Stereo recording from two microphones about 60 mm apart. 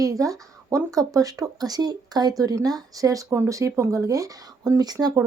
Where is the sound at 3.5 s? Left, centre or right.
Right.